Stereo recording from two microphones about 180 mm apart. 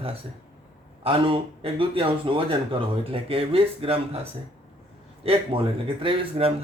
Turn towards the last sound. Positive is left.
turn(degrees=-30)  # may be behind; listen again after turning